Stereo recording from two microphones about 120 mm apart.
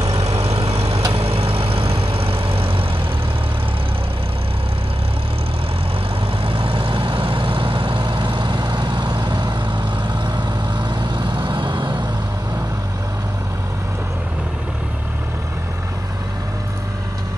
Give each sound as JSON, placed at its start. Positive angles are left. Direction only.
{"t": 0.0, "sound": "vehicle", "side_deg": -65}
{"t": 6.4, "sound": "vehicle", "side_deg": -50}